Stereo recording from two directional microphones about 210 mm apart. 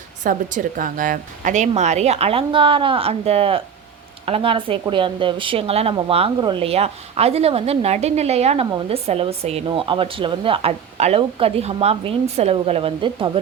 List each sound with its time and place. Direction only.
0.2 s a woman's voice: 40° right (ahead or behind)